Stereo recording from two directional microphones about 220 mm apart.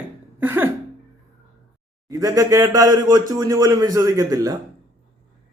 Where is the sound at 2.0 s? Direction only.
15° right (ahead or behind).